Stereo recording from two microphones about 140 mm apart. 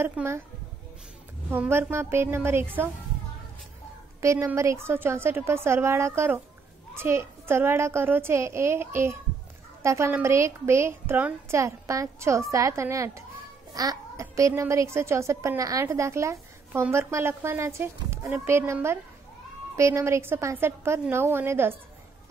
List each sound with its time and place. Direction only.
0.0 s a woman's voice: 15° right (ahead or behind)
1.5 s a woman's voice: 15° right (ahead or behind)
4.2 s a woman's voice: 20° right (ahead or behind)